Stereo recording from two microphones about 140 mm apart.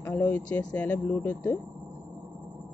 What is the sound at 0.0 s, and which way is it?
Speech, 15° left (ahead or behind).